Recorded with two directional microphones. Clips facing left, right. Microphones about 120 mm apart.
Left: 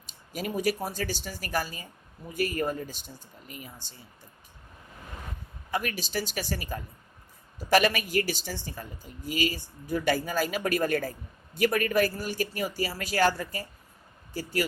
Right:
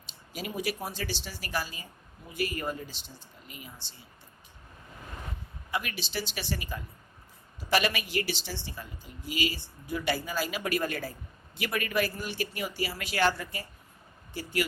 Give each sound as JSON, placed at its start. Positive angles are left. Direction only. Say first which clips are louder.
{"t": 0.0, "sound": "a woman's voice", "louder": "left 4 dB", "side_deg": 45}
{"t": 5.7, "sound": "a woman's voice", "louder": "left 3 dB", "side_deg": 45}